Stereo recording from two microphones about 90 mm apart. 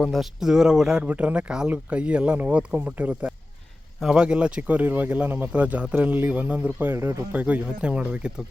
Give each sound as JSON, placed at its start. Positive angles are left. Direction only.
{"t": 0.0, "sound": "speech", "side_deg": 0}
{"t": 7.3, "sound": "speech", "side_deg": -15}